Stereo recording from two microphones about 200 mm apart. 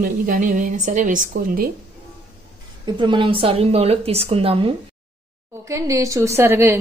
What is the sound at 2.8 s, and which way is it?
A woman's voice, 25° right (ahead or behind).